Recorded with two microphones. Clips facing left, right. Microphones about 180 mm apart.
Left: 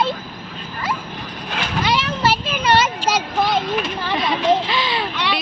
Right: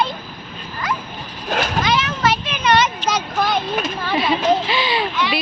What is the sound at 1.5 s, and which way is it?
Speech, 45° right (ahead or behind).